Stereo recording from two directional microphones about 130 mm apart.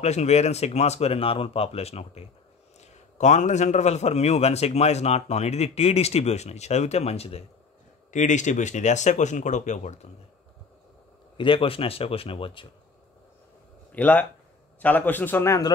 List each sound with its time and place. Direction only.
0.0 s a man's voice: 60° left (ahead or behind)
2.8 s a man's voice: 65° left (ahead or behind)
8.1 s speech: 70° left (ahead or behind)
11.3 s speech: 40° left (ahead or behind)
13.9 s a man's voice: 10° left (ahead or behind)